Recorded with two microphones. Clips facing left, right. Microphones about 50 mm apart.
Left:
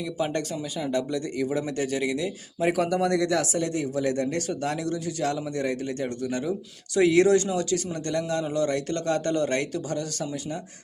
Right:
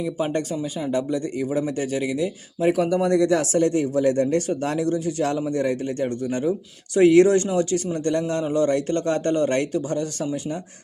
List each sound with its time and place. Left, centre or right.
0.5 s a man's voice: centre
2.6 s speech: centre
3.0 s a man's voice: right
3.4 s a man's voice: right